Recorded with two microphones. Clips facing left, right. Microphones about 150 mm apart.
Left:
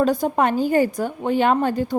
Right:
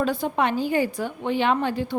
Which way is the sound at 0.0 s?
40° left (ahead or behind).